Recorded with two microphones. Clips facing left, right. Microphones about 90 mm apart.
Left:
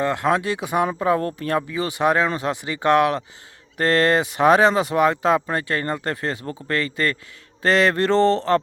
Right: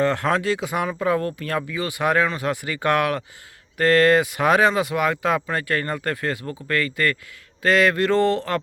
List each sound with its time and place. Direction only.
0.0 s speech: 15° left (ahead or behind)